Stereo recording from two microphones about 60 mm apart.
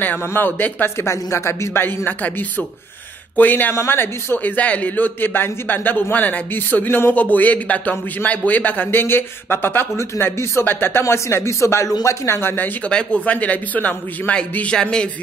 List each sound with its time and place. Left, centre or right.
0.3 s speech: left
0.9 s speech: left
3.7 s a man's voice: left
9.0 s speech: left
12.4 s speech: left
12.9 s a man's voice: left
14.7 s speech: centre